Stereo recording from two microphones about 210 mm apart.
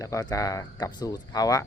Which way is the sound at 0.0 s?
15° left (ahead or behind).